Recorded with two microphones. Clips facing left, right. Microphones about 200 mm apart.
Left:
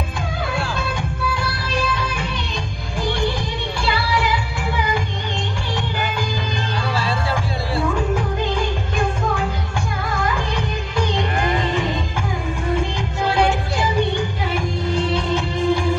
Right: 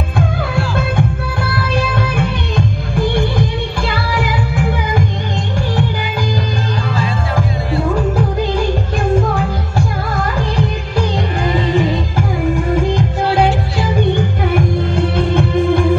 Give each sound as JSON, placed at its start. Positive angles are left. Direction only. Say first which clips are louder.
{"t": 2.0, "sound": "music", "louder": "right 7 dB", "side_deg": -55}
{"t": 14.5, "sound": "music", "louder": "right 6 dB", "side_deg": -55}